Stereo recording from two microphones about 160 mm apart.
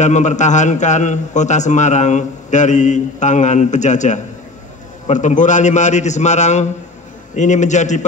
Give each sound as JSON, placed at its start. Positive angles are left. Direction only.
{"t": 0.0, "sound": "a man's voice", "side_deg": 50}